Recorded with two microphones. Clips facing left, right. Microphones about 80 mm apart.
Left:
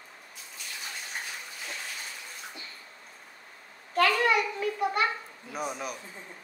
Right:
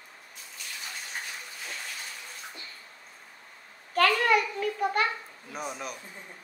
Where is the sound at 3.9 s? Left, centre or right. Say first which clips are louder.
Right 1 dB; right.